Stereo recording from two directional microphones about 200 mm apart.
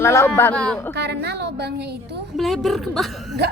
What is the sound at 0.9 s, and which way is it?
A woman's voice, 55° right (ahead or behind).